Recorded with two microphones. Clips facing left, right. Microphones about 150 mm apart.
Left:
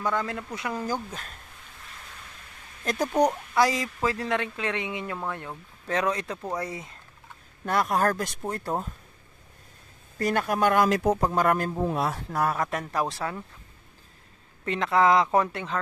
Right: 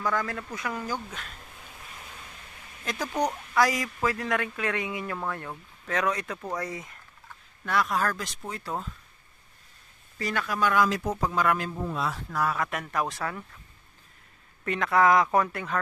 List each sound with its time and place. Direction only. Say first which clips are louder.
0.0 s speech: left 1 dB; 25° left (ahead or behind)
2.8 s speech: left 5 dB; 40° left (ahead or behind)
3.3 s speech: left 2 dB; 25° left (ahead or behind)
5.9 s speech: left 1 dB; 30° left (ahead or behind)
7.6 s speech: left 3 dB; 45° left (ahead or behind)
10.1 s speech: left 5 dB; 50° left (ahead or behind)
12.3 s speech: left 2 dB; 40° left (ahead or behind)
14.6 s speech: left 1 dB; 25° left (ahead or behind)